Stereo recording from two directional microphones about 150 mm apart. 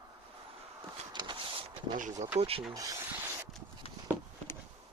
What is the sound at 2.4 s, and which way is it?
Speech, 40° right (ahead or behind).